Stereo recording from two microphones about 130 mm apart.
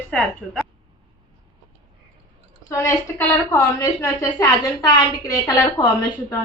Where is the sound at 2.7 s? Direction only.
25° left (ahead or behind).